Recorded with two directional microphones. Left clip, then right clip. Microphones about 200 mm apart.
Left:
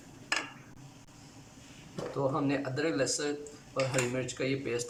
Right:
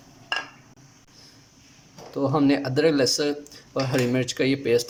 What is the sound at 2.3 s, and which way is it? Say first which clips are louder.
Speech: right 10 dB; 55° right (ahead or behind).